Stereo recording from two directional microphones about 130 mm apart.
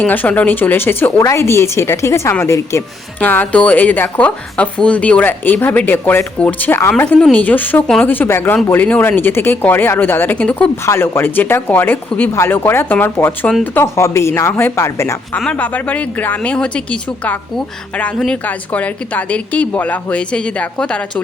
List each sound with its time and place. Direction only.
0.0 s a woman's voice: 15° left (ahead or behind)
15.4 s a woman's voice: 10° left (ahead or behind)